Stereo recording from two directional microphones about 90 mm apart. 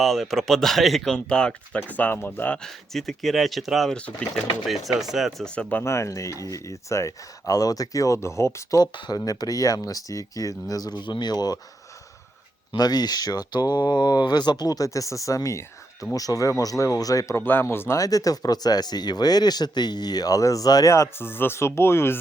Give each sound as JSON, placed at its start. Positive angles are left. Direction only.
{"t": 0.0, "sound": "speech", "side_deg": 0}
{"t": 2.6, "sound": "speech", "side_deg": 5}
{"t": 3.8, "sound": "speech", "side_deg": 15}
{"t": 4.9, "sound": "speech", "side_deg": -5}
{"t": 5.5, "sound": "speech", "side_deg": 15}
{"t": 5.8, "sound": "speech", "side_deg": 30}
{"t": 9.0, "sound": "speech", "side_deg": 50}
{"t": 12.7, "sound": "speech", "side_deg": 50}
{"t": 17.3, "sound": "speech", "side_deg": 25}